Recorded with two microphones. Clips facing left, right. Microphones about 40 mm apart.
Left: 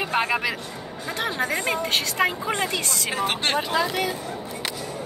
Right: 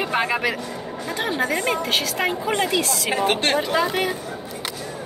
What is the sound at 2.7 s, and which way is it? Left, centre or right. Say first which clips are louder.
Speech: right 5 dB; right.